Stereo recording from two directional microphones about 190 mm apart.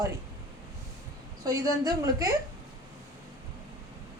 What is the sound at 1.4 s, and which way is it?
Speech, 20° right (ahead or behind).